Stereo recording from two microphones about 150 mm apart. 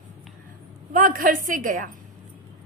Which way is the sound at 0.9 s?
65° right (ahead or behind).